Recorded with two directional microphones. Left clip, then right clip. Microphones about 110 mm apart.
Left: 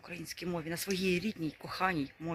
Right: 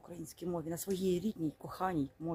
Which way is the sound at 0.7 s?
25° right (ahead or behind).